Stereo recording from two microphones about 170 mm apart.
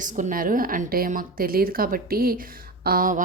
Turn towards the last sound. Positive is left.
turn(degrees=-50)  # may be behind; listen again after turning